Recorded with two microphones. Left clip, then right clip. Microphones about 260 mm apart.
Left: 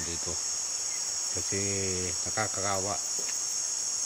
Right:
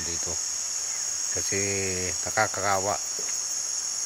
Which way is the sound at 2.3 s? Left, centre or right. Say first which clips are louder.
Right 7 dB; centre.